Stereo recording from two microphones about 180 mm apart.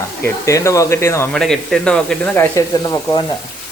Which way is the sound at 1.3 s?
Centre (ahead or behind).